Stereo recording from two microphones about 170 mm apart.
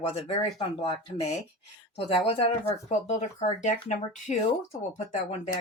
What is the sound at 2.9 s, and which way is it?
Speech, 45° left (ahead or behind).